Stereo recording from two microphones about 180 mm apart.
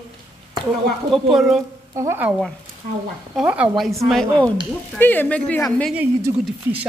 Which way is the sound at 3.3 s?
5° right (ahead or behind).